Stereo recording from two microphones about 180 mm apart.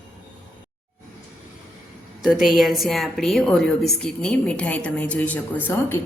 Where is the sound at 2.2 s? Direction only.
Centre (ahead or behind).